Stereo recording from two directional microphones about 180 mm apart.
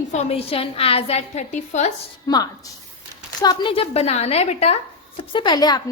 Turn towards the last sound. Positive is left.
turn(degrees=20)  # may be behind; listen again after turning